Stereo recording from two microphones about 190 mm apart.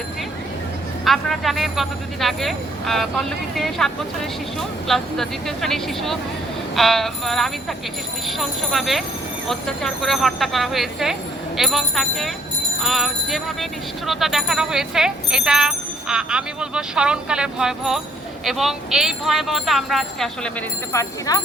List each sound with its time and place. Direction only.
1.0 s speech: centre (ahead or behind)
20.9 s speech: 15° left (ahead or behind)